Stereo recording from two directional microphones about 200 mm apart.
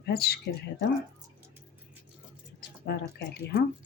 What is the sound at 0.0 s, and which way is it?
Speech, 50° left (ahead or behind).